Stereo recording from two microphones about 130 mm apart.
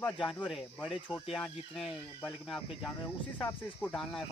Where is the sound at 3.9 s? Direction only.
Centre (ahead or behind).